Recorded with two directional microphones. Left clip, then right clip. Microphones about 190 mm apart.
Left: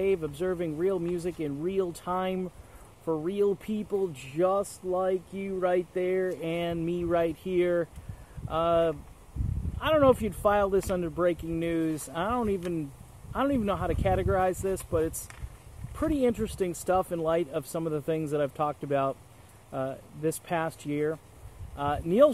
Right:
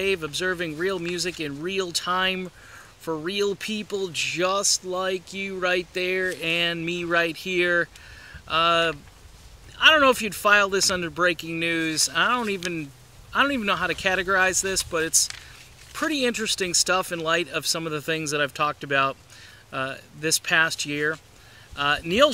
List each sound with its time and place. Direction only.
0.0 s speech: 10° right (ahead or behind)
3.1 s speech: 25° right (ahead or behind)
4.1 s speech: 10° right (ahead or behind)